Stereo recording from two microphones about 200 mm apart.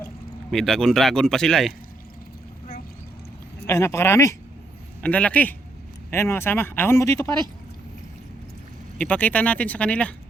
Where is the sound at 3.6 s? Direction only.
15° left (ahead or behind).